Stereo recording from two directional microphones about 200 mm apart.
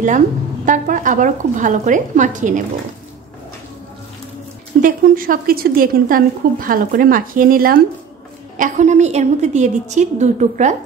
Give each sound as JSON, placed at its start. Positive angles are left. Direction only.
{"t": 0.7, "sound": "a woman's voice", "side_deg": -40}
{"t": 4.8, "sound": "a woman's voice", "side_deg": -45}